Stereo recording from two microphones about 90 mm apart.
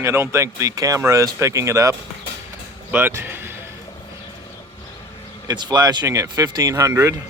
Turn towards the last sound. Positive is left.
turn(degrees=-30)  # may be behind; listen again after turning